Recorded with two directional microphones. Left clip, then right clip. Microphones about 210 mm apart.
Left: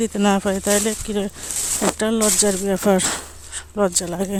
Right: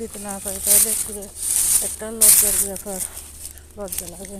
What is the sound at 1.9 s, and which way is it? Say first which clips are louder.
Speech: left 1 dB; 45° left (ahead or behind).